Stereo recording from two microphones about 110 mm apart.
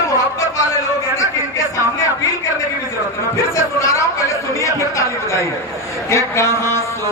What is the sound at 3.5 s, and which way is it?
A man's voice, 25° left (ahead or behind).